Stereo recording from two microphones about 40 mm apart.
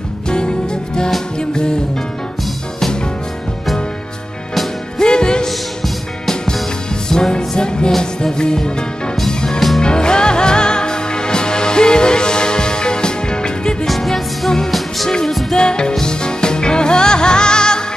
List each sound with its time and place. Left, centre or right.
0.3 s music: left
4.9 s music: left
6.2 s music: centre
7.1 s music: centre
13.8 s music: centre
15.5 s music: left